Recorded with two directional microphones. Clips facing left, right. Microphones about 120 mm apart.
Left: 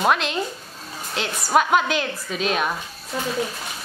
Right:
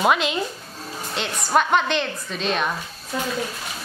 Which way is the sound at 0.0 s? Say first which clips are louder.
Right 1 dB; centre (ahead or behind).